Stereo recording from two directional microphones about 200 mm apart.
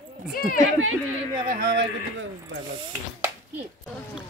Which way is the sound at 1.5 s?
55° right (ahead or behind).